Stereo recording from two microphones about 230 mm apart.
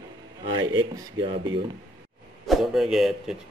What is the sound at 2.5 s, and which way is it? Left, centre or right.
Speech, centre.